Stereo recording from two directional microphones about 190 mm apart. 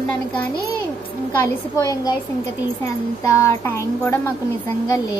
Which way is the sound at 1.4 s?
20° left (ahead or behind).